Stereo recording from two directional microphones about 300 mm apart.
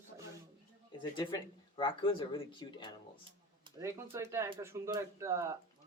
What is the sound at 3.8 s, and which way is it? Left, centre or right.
Speech, centre.